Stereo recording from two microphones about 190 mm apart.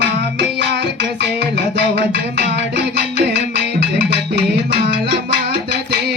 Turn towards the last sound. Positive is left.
turn(degrees=-60)  # may be behind; listen again after turning